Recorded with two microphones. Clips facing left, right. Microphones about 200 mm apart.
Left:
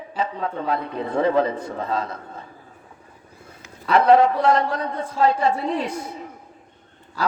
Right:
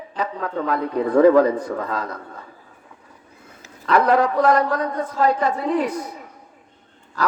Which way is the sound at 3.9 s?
25° left (ahead or behind).